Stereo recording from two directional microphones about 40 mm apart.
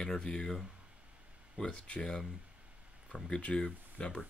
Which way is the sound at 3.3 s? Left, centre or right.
Left.